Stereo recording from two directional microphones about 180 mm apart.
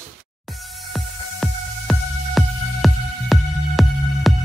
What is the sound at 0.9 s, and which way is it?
Music, centre (ahead or behind).